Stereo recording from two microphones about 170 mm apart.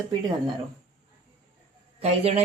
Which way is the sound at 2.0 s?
40° right (ahead or behind).